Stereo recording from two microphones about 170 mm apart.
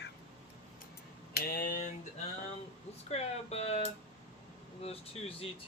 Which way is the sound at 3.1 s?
40° left (ahead or behind).